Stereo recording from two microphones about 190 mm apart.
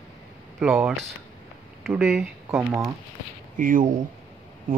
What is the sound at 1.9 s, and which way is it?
Speech, 5° right (ahead or behind).